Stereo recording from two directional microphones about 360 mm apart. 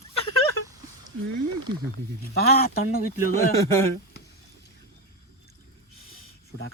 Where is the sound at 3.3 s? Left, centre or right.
Centre.